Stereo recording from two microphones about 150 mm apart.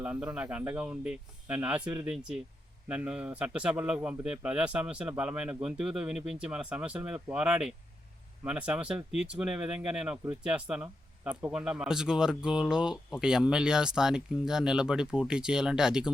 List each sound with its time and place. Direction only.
0.0 s a man's voice: 10° right (ahead or behind)